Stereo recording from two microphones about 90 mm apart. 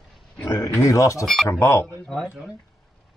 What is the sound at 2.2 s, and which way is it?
Speech, 10° right (ahead or behind).